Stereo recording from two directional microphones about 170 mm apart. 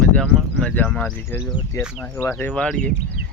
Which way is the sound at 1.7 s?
20° left (ahead or behind).